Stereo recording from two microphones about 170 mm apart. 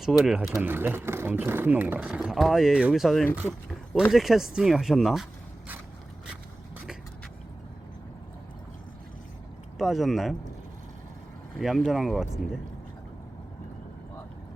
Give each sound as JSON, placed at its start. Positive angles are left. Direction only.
{"t": 0.0, "sound": "speech", "side_deg": 0}
{"t": 9.7, "sound": "speech", "side_deg": 0}
{"t": 11.5, "sound": "speech", "side_deg": 0}